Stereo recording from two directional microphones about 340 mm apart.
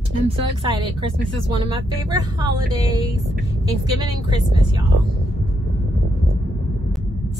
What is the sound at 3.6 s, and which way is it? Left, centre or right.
A woman's voice, centre.